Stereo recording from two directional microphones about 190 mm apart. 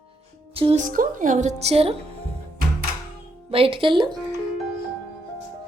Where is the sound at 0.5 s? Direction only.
30° right (ahead or behind).